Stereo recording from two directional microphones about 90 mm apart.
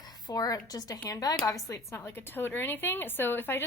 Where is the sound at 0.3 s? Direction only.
45° left (ahead or behind).